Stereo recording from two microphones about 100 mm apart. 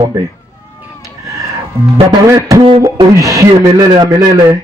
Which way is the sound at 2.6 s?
60° right (ahead or behind).